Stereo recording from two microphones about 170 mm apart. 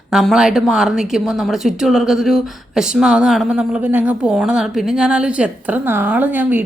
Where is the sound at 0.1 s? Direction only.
Centre (ahead or behind).